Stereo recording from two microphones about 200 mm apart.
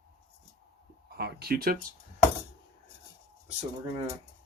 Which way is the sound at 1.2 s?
55° right (ahead or behind).